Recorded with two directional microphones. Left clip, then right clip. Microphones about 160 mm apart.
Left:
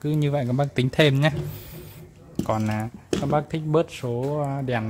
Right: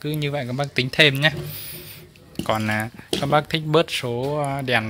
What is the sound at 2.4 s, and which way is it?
Speech, centre (ahead or behind).